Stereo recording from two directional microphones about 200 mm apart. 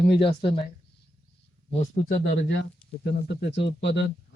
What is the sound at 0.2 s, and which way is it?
Speech, 25° left (ahead or behind).